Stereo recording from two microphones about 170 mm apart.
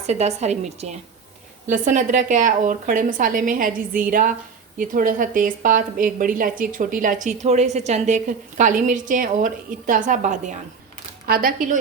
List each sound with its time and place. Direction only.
0.1 s a woman's voice: 40° right (ahead or behind)
11.3 s speech: 60° right (ahead or behind)